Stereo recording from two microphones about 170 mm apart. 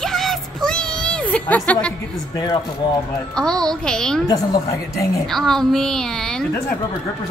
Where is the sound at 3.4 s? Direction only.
5° left (ahead or behind).